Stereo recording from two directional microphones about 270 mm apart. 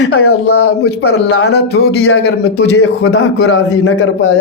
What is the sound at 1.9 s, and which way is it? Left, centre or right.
Speech, left.